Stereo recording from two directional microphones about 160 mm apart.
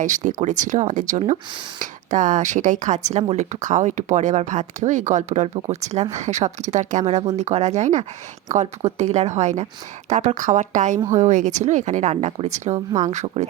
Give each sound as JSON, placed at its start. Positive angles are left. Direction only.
{"t": 0.0, "sound": "speech", "side_deg": -50}